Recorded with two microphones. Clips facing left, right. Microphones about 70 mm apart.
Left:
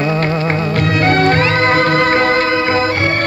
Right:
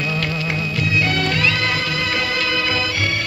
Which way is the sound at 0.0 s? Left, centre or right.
Left.